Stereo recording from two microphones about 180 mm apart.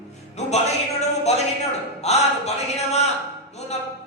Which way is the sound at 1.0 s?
35° left (ahead or behind).